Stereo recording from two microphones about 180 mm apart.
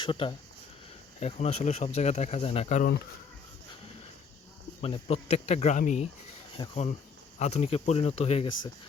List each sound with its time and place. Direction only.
0.0 s speech: 30° left (ahead or behind)
4.8 s speech: 30° left (ahead or behind)
6.6 s speech: 25° left (ahead or behind)
7.3 s speech: 40° left (ahead or behind)